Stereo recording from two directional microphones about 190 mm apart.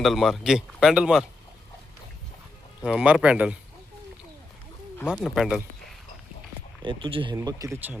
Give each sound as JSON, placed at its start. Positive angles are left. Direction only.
{"t": 0.0, "sound": "speech", "side_deg": 0}
{"t": 2.8, "sound": "speech", "side_deg": -5}
{"t": 4.9, "sound": "speech", "side_deg": 5}
{"t": 6.8, "sound": "speech", "side_deg": -25}